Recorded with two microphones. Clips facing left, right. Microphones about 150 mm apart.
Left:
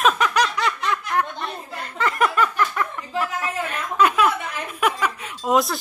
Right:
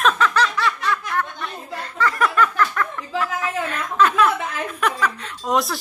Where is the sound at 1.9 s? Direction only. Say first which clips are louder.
Even; 20° left (ahead or behind).